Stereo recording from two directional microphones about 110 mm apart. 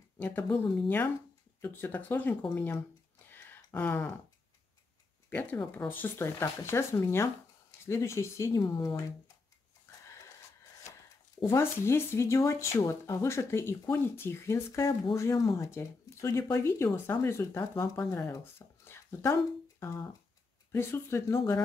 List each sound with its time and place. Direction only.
0.2 s speech: 15° left (ahead or behind)
3.3 s a sound: 20° left (ahead or behind)
5.3 s speech: 15° left (ahead or behind)
11.4 s speech: 25° left (ahead or behind)